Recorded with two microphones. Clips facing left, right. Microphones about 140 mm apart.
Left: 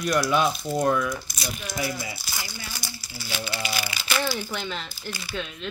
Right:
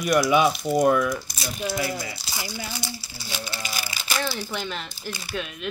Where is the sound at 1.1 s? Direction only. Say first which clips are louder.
Right 2 dB; 35° right (ahead or behind).